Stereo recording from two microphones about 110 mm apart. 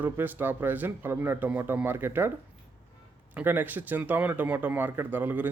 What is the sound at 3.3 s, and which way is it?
Speech, 20° right (ahead or behind).